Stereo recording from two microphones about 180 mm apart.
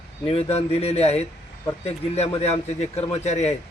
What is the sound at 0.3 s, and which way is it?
A man's voice, 35° left (ahead or behind).